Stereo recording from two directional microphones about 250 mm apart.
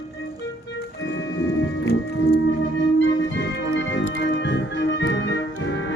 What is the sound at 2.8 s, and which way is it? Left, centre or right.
Music, left.